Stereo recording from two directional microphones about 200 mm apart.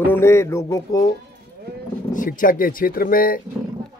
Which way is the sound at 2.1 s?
40° left (ahead or behind).